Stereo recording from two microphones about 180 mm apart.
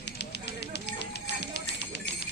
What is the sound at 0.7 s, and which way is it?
Music, 70° left (ahead or behind).